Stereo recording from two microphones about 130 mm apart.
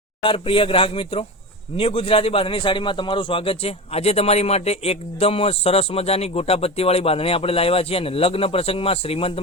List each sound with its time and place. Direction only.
0.2 s a man's voice: 45° left (ahead or behind)